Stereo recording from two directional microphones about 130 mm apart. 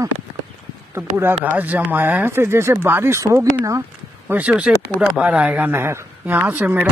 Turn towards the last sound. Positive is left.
turn(degrees=-15)  # may be behind; listen again after turning